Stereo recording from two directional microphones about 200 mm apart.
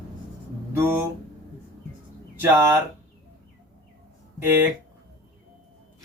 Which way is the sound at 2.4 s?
15° right (ahead or behind).